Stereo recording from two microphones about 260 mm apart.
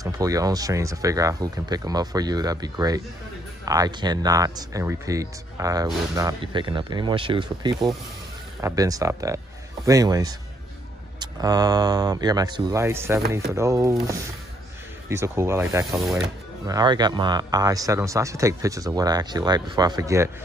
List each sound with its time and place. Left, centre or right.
0.0 s speech: centre
16.6 s speech: centre